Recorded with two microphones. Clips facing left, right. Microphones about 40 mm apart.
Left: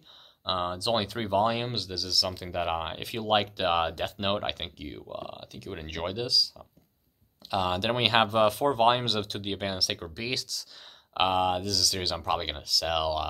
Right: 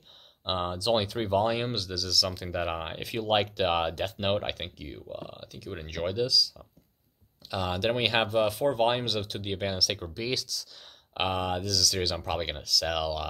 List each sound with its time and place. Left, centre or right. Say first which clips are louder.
0.5 s speech: right 1 dB; centre
5.0 s speech: even; left
6.0 s speech: right 2 dB; centre; by 9.4 s left
9.4 s speech: right 1 dB; centre